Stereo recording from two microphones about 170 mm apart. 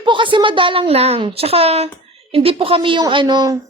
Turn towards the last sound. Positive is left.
turn(degrees=-20)  # may be behind; listen again after turning